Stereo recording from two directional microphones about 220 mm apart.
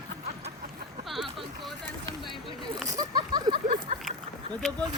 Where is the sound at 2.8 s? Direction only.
15° right (ahead or behind).